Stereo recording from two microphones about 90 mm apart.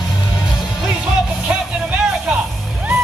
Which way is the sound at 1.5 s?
5° right (ahead or behind).